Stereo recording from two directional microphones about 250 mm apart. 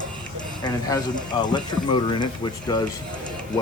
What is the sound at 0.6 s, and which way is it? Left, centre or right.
Speech, centre.